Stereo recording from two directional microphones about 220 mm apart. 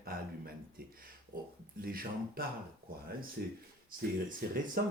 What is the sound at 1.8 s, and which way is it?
Speech, 40° right (ahead or behind).